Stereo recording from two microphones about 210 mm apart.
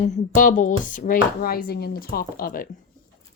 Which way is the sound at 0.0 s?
40° left (ahead or behind).